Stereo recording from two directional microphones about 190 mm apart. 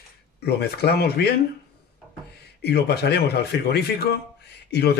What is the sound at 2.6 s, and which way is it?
Speech, 60° left (ahead or behind).